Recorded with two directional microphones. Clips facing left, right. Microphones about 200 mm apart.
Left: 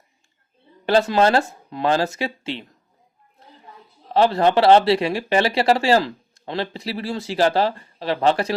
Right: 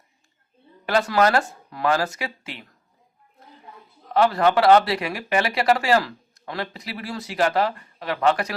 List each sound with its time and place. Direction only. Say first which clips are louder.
0.9 s speech: left 3 dB; 25° left (ahead or behind)
4.0 s speech: left 2 dB; 30° left (ahead or behind)